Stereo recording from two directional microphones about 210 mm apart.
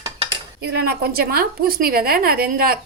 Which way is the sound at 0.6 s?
50° right (ahead or behind).